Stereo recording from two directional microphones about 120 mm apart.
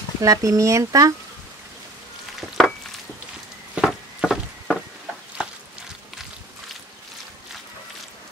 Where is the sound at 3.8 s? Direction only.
Centre (ahead or behind).